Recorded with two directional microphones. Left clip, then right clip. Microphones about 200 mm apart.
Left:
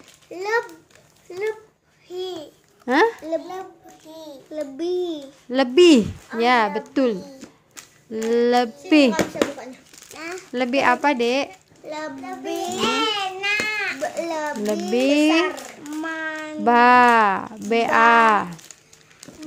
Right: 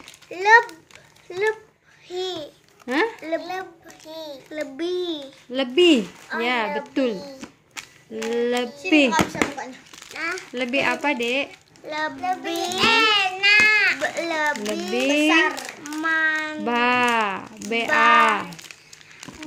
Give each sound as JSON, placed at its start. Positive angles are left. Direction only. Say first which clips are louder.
{"t": 0.3, "sound": "a child's voice", "louder": "right 8 dB", "side_deg": -5}
{"t": 2.1, "sound": "a child's voice", "louder": "right 2 dB", "side_deg": -5}
{"t": 2.9, "sound": "a child's voice", "louder": "left 5 dB", "side_deg": 25}
{"t": 3.3, "sound": "a child's voice", "louder": "even", "side_deg": 5}
{"t": 4.5, "sound": "speech", "louder": "left 2 dB", "side_deg": 20}
{"t": 7.3, "sound": "a sound", "louder": "right 5 dB", "side_deg": -10}
{"t": 8.3, "sound": "speech", "louder": "left 5 dB", "side_deg": 25}
{"t": 9.1, "sound": "a child's voice", "louder": "right 1 dB", "side_deg": -35}
{"t": 10.1, "sound": "a child's voice", "louder": "even", "side_deg": 25}
{"t": 12.5, "sound": "music", "louder": "right 3 dB", "side_deg": 10}
{"t": 14.0, "sound": "speech", "louder": "right 2 dB", "side_deg": 25}